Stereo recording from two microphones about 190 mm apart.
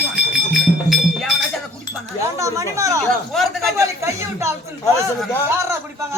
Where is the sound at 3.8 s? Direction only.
15° right (ahead or behind).